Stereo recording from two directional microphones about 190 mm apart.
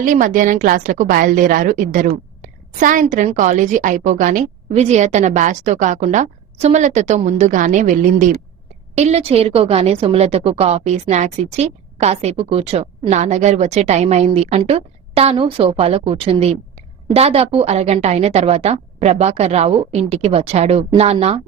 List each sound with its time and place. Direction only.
0.0 s a woman's voice: 45° right (ahead or behind)